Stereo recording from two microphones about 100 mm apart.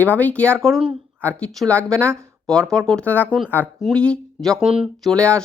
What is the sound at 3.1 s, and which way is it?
Speech, 15° left (ahead or behind).